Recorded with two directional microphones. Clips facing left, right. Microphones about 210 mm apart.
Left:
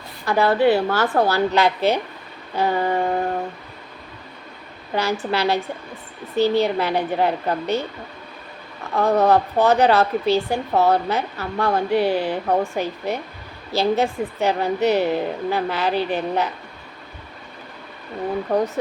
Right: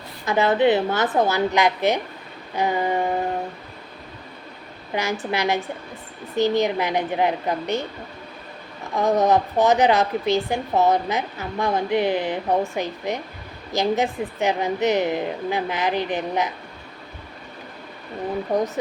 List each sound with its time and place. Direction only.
0.3 s a woman's voice: 20° right (ahead or behind)
4.9 s a woman's voice: 15° right (ahead or behind)
9.0 s a woman's voice: 15° right (ahead or behind)